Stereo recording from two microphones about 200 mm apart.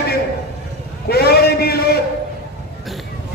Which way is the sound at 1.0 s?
50° left (ahead or behind).